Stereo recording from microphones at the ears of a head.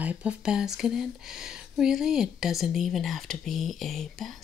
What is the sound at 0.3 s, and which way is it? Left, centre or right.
Speech, left.